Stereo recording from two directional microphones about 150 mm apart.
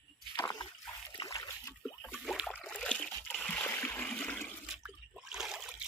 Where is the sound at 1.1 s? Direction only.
25° left (ahead or behind).